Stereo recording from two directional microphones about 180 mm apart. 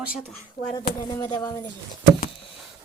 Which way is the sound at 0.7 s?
25° left (ahead or behind).